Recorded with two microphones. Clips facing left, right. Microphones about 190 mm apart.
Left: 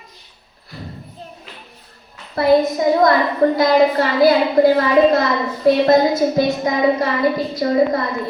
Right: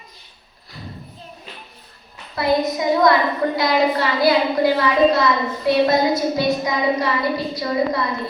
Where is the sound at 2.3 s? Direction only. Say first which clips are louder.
Left 5 dB; 50° left (ahead or behind).